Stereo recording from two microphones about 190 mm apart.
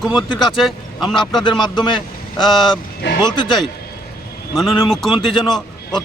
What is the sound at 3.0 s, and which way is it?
Speech, 65° left (ahead or behind).